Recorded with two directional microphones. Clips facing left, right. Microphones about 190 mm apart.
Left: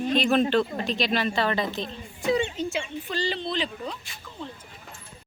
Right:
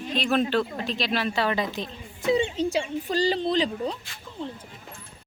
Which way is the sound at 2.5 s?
35° right (ahead or behind).